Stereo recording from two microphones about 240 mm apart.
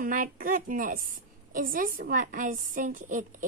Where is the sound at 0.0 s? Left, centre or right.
Right.